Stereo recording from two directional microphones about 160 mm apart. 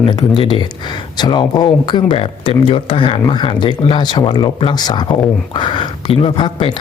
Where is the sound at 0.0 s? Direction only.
30° left (ahead or behind).